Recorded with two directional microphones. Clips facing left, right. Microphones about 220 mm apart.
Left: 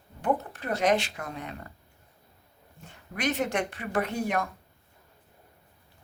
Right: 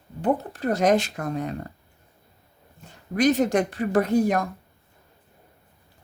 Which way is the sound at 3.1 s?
35° right (ahead or behind).